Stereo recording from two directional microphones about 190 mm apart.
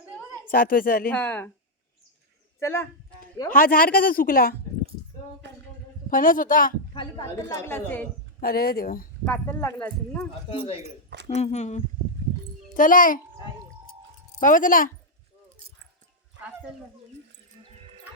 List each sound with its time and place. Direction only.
0.5 s a woman's voice: 50° left (ahead or behind)
1.1 s a woman's voice: 10° left (ahead or behind)
2.6 s speech: 15° left (ahead or behind)
3.5 s a woman's voice: 50° left (ahead or behind)
5.4 s a sound: 65° right (ahead or behind)
6.1 s a woman's voice: 45° left (ahead or behind)
6.9 s a woman's voice: 20° left (ahead or behind)
8.4 s a woman's voice: 50° left (ahead or behind)
9.2 s a woman's voice: 10° left (ahead or behind)
10.5 s speech: 30° left (ahead or behind)
11.1 s speech: 65° right (ahead or behind)
11.3 s a woman's voice: 35° left (ahead or behind)
14.4 s a woman's voice: 45° left (ahead or behind)